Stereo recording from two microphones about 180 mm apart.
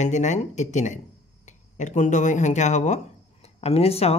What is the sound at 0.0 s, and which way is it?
Speech, 40° left (ahead or behind).